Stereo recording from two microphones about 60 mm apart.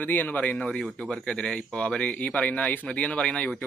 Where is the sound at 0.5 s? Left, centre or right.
Centre.